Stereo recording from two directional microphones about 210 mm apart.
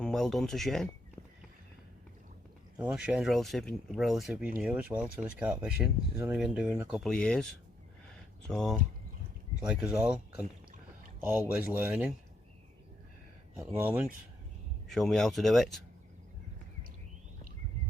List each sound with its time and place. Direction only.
0.0 s speech: centre (ahead or behind)
2.7 s speech: 5° right (ahead or behind)
8.4 s speech: 5° left (ahead or behind)
13.6 s speech: 5° right (ahead or behind)